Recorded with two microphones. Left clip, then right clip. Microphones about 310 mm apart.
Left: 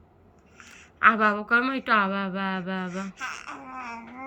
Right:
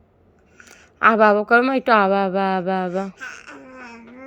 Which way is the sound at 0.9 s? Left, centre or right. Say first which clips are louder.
Right 6 dB; centre.